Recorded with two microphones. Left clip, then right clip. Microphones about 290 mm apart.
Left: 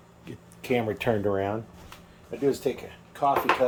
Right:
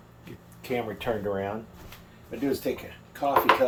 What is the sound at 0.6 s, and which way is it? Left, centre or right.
Speech, left.